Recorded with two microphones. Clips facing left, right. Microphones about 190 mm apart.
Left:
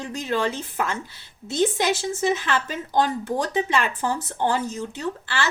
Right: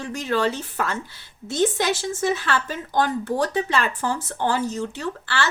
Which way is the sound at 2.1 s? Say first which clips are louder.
Even; 20° left (ahead or behind).